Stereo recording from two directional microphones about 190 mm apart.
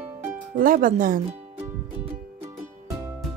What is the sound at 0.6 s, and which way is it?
Speech, 45° right (ahead or behind).